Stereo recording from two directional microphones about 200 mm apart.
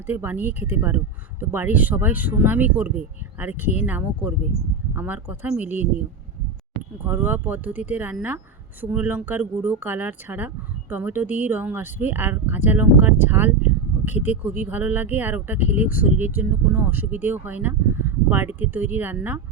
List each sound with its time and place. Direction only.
0.1 s speech: 10° right (ahead or behind)
7.0 s speech: 10° right (ahead or behind)